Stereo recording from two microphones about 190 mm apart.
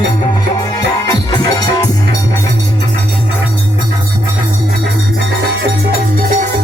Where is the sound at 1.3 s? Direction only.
20° left (ahead or behind).